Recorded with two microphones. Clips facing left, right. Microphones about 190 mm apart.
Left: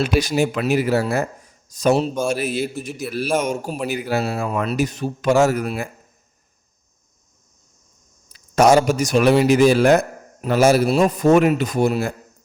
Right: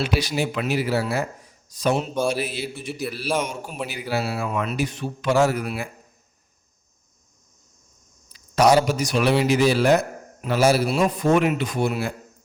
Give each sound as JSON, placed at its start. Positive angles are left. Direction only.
{"t": 0.0, "sound": "a man's voice", "side_deg": 45}
{"t": 8.3, "sound": "a man's voice", "side_deg": 45}